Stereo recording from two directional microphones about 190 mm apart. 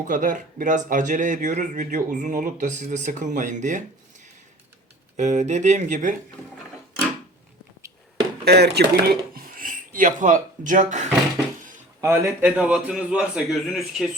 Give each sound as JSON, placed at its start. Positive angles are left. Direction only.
{"t": 0.1, "sound": "speech", "side_deg": -45}
{"t": 5.1, "sound": "speech", "side_deg": -40}
{"t": 7.8, "sound": "a sound", "side_deg": -15}
{"t": 8.4, "sound": "speech", "side_deg": -60}
{"t": 11.9, "sound": "a man's voice", "side_deg": -15}